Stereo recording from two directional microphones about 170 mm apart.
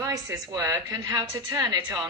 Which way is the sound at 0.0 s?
20° right (ahead or behind).